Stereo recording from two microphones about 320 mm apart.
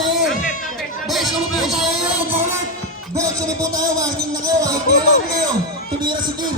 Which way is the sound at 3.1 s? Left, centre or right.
Centre.